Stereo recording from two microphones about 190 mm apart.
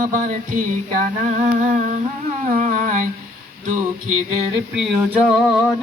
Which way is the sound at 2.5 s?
45° right (ahead or behind).